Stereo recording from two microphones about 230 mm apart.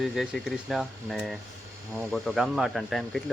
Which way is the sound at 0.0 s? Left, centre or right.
Centre.